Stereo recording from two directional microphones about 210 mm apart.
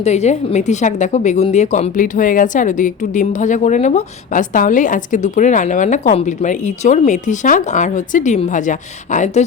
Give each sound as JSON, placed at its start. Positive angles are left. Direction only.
{"t": 0.0, "sound": "a woman's voice", "side_deg": 30}